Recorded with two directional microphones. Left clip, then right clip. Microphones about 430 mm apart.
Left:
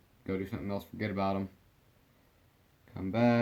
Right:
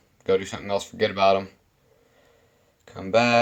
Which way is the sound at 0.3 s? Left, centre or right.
Centre.